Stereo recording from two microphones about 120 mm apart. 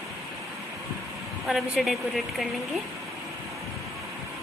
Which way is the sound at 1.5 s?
Centre (ahead or behind).